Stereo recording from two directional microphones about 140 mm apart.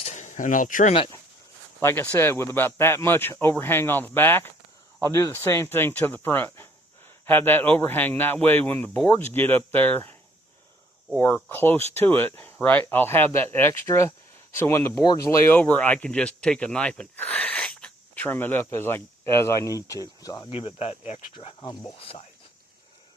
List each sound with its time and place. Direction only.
0.0 s a sound: 60° left (ahead or behind)
1.8 s speech: 15° left (ahead or behind)
11.2 s speech: 15° left (ahead or behind)
20.5 s speech: 45° left (ahead or behind)